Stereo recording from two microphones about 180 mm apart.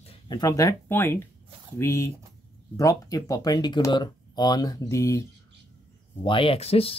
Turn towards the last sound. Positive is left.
turn(degrees=35)  # may be behind; listen again after turning